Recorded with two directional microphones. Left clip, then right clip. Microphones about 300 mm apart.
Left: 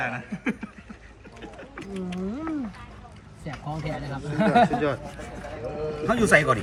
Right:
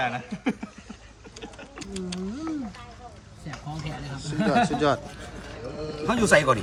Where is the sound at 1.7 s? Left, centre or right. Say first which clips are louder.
Left 1 dB; centre.